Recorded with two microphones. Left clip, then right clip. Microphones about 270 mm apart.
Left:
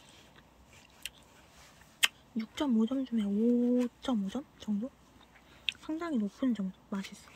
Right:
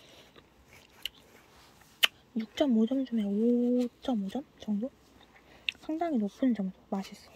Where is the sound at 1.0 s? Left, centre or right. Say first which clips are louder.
Right 5 dB; centre.